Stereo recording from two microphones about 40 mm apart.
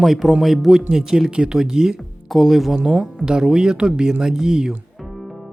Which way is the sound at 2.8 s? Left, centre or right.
Centre.